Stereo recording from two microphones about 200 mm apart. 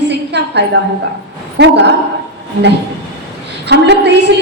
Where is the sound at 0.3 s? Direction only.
60° right (ahead or behind).